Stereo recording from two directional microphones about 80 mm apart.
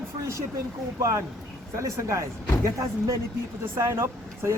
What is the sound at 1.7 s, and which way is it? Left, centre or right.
Speech, right.